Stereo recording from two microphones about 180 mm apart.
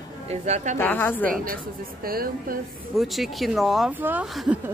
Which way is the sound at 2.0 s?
55° right (ahead or behind).